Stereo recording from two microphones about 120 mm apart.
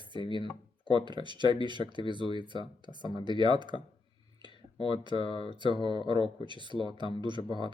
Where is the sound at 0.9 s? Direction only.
40° right (ahead or behind).